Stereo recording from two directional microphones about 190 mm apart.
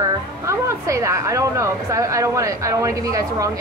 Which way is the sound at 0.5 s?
15° right (ahead or behind).